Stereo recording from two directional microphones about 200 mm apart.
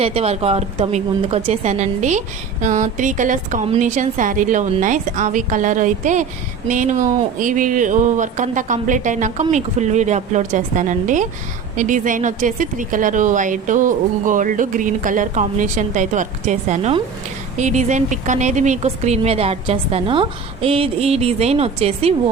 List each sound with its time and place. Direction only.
0.0 s speech: 30° right (ahead or behind)